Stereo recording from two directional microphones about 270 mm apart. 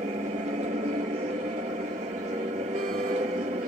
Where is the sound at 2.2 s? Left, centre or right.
Right.